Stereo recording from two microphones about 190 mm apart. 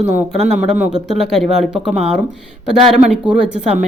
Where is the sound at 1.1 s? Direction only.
Centre (ahead or behind).